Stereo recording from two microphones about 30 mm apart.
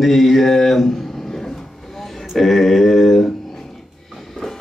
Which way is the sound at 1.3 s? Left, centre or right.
Centre.